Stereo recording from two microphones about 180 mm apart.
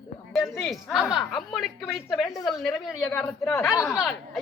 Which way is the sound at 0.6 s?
Centre (ahead or behind).